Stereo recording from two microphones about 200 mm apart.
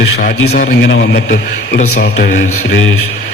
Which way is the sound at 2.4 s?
75° left (ahead or behind).